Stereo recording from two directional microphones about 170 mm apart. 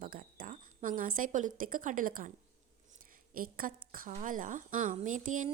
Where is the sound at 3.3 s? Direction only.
55° right (ahead or behind).